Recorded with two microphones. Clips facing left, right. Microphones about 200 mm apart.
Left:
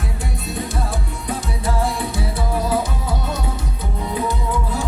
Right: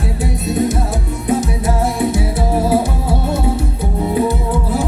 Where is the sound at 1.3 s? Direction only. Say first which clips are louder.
Right 8 dB; 25° right (ahead or behind).